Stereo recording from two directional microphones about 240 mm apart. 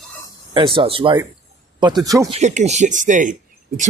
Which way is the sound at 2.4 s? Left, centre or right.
Right.